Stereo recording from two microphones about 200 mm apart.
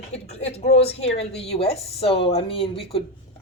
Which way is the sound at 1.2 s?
30° left (ahead or behind).